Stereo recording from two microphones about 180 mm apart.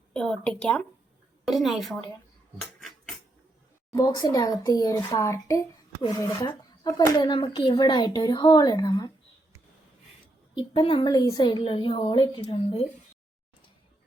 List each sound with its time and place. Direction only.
0.1 s speech: 5° left (ahead or behind)
2.6 s a sound: centre (ahead or behind)
3.9 s speech: 20° left (ahead or behind)
10.5 s speech: 25° left (ahead or behind)